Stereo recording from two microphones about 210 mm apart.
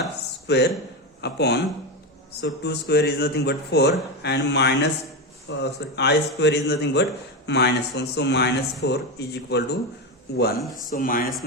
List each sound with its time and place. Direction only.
0.4 s a man's voice: 50° left (ahead or behind)
10.8 s speech: 40° left (ahead or behind)